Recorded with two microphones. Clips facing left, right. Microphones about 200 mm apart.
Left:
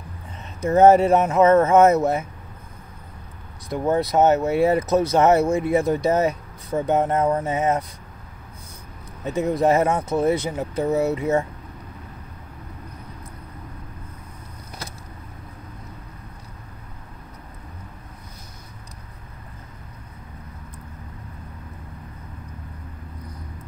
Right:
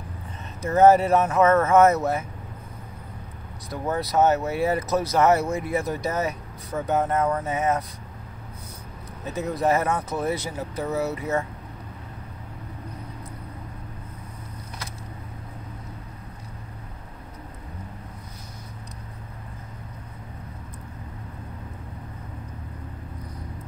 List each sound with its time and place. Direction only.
0.7 s speech: 25° left (ahead or behind)
3.7 s speech: 20° left (ahead or behind)
9.2 s speech: 30° left (ahead or behind)